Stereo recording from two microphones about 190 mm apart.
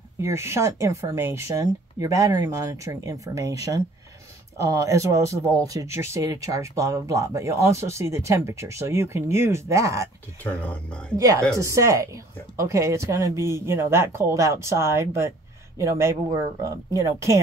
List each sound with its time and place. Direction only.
0.2 s speech: 15° right (ahead or behind)
10.4 s speech: 5° left (ahead or behind)
11.1 s speech: 15° right (ahead or behind)